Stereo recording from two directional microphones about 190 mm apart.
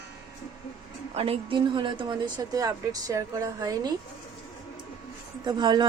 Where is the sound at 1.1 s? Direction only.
30° right (ahead or behind).